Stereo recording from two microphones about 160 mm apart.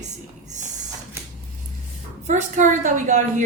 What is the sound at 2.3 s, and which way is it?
Speech, 50° right (ahead or behind).